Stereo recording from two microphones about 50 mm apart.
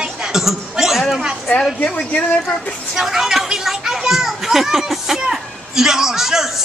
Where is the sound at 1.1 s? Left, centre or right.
Centre.